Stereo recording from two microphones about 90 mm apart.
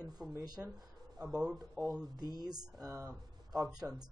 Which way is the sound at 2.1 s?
45° right (ahead or behind).